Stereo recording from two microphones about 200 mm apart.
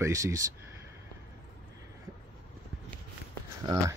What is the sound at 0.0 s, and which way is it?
Speech, 15° right (ahead or behind).